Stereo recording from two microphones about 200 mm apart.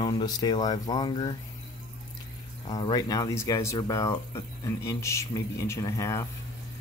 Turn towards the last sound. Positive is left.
turn(degrees=15)  # may be behind; listen again after turning